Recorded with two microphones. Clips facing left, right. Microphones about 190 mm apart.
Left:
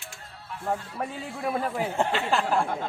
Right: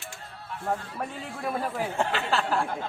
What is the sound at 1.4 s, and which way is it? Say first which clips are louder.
Speech: left 2 dB; centre (ahead or behind).